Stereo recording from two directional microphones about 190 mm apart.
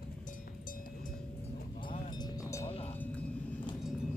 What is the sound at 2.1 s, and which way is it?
Vehicle, 20° left (ahead or behind).